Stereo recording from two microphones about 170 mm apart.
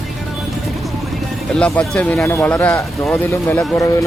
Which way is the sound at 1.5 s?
5° left (ahead or behind).